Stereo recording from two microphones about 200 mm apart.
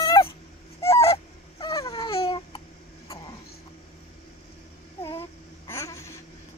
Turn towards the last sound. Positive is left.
turn(degrees=15)  # may be behind; listen again after turning